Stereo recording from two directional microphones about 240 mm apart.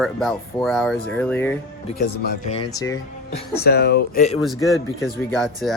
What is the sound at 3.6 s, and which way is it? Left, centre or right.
Speech, left.